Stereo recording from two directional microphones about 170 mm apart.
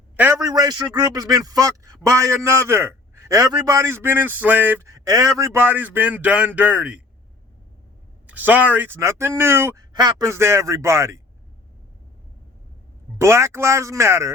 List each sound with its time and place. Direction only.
0.2 s a man's voice: 15° right (ahead or behind)
8.3 s a man's voice: 10° right (ahead or behind)
13.1 s a man's voice: 15° right (ahead or behind)